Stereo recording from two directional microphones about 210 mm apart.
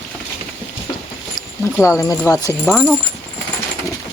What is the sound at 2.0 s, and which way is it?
Speech, 15° left (ahead or behind).